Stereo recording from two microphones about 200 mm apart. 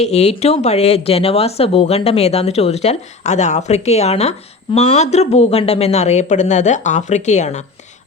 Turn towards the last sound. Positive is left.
turn(degrees=35)  # may be behind; listen again after turning